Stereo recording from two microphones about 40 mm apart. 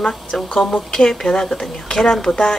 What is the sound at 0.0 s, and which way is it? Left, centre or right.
A woman's voice, centre.